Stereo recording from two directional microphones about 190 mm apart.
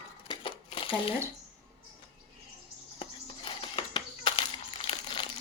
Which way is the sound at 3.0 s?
25° left (ahead or behind).